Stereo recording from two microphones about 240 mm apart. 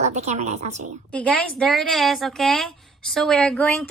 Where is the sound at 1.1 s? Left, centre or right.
Centre.